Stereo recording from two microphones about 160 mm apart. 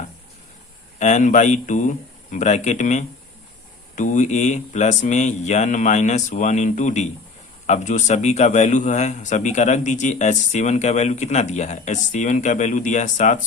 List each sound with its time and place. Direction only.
0.9 s a man's voice: 50° left (ahead or behind)